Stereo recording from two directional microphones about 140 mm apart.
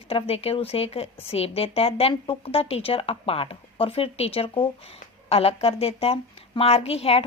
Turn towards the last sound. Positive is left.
turn(degrees=45)  # may be behind; listen again after turning